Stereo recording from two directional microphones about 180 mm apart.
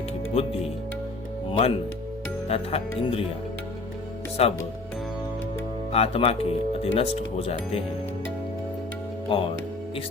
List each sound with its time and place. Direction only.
0.4 s speech: 35° left (ahead or behind)
4.4 s speech: 35° left (ahead or behind)
5.9 s speech: 30° left (ahead or behind)